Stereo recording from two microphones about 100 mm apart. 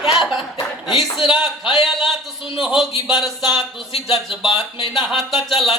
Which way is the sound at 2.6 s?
Centre (ahead or behind).